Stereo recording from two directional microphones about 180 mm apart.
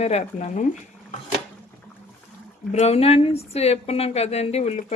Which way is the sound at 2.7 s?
35° left (ahead or behind).